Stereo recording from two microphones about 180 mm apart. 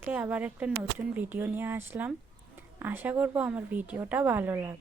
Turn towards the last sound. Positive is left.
turn(degrees=-15)  # may be behind; listen again after turning